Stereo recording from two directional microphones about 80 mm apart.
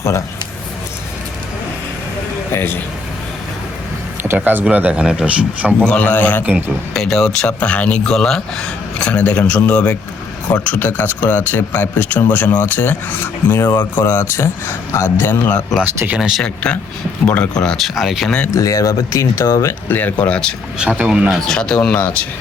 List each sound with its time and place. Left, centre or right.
0.0 s speech: left
2.5 s speech: left
4.4 s speech: centre
5.8 s speech: centre
6.4 s a man's voice: right
6.9 s a man's voice: centre; by 15.6 s left
16.0 s speech: centre
17.2 s speech: centre
17.6 s speech: centre
18.3 s a man's voice: centre
18.5 s speech: left
19.9 s a man's voice: left
21.1 s speech: centre
21.4 s a man's voice: centre